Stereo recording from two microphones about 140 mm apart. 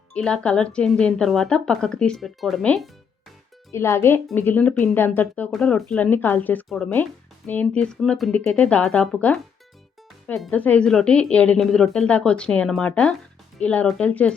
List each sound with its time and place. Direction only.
0.1 s speech: 5° left (ahead or behind)
3.7 s a woman's voice: 20° left (ahead or behind); by 6.1 s 5° left (ahead or behind)
6.1 s a woman's voice: 15° left (ahead or behind)